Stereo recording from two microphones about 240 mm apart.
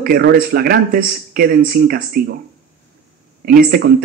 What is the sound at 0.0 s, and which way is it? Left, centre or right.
Speech, right.